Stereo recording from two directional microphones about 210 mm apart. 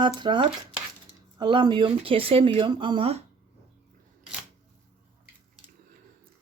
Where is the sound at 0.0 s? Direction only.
20° right (ahead or behind).